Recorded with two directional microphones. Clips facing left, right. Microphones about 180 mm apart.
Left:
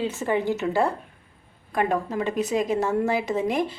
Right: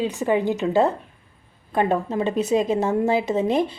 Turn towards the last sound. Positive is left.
turn(degrees=-20)  # may be behind; listen again after turning